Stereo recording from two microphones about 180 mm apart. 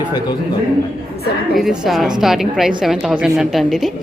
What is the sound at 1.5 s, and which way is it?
A woman's voice, 5° right (ahead or behind).